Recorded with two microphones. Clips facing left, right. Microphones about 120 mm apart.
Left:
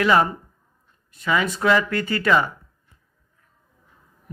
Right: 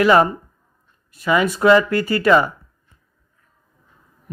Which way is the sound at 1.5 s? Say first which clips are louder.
Right 9 dB; 30° right (ahead or behind).